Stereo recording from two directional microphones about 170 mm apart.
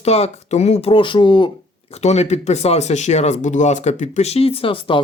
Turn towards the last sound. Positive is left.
turn(degrees=30)  # may be behind; listen again after turning